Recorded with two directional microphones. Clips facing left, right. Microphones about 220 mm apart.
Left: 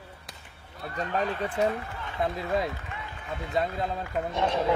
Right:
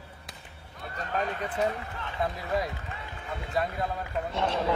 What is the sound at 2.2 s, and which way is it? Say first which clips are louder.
Speech: left 2 dB; 25° left (ahead or behind).